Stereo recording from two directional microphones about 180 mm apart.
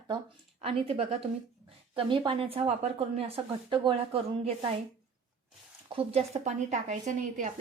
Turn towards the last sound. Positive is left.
turn(degrees=-45)  # may be behind; listen again after turning